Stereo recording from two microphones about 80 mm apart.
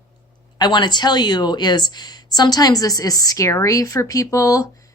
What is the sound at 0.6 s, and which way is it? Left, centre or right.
A woman's voice, left.